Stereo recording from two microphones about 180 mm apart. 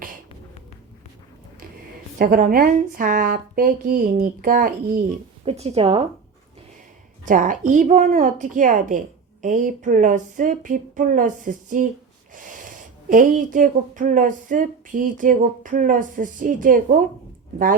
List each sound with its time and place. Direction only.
2.1 s speech: 50° right (ahead or behind)
5.5 s speech: 35° right (ahead or behind)
7.3 s speech: 45° right (ahead or behind)